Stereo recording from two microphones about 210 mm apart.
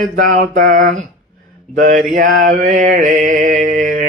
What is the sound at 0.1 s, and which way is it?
Mantra, 45° right (ahead or behind).